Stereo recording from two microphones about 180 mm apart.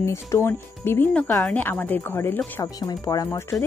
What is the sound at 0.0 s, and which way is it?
Speech, 15° left (ahead or behind).